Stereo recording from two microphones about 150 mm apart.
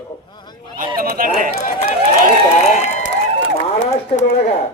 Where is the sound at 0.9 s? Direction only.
70° right (ahead or behind).